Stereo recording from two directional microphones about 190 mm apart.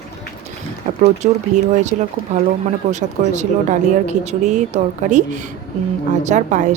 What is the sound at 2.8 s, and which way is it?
Speech, 40° right (ahead or behind).